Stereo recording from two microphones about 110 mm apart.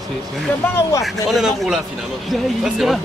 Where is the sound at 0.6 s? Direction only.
25° left (ahead or behind).